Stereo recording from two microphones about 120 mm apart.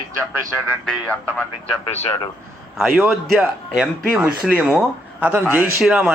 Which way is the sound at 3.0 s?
5° right (ahead or behind).